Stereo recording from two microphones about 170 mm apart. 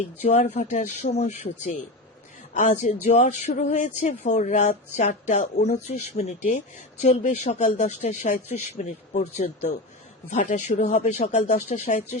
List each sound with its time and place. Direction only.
0.2 s speech: 40° left (ahead or behind)